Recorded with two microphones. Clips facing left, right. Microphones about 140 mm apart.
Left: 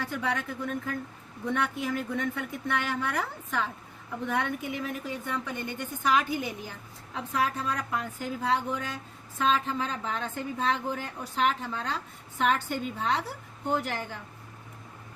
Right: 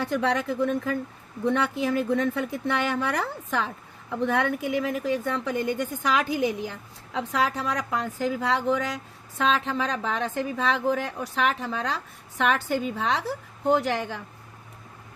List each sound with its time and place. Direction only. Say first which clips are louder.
0.1 s a woman's voice: right 7 dB; 90° right